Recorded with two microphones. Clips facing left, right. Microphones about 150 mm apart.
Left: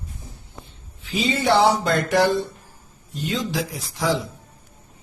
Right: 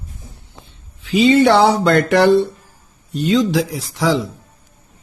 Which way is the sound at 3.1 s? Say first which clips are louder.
Right 10 dB; 80° right.